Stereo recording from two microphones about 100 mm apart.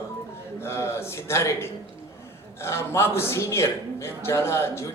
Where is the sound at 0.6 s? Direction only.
25° left (ahead or behind).